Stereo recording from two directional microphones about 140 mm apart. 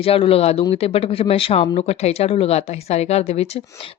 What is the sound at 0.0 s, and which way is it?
A woman's voice, 40° left (ahead or behind).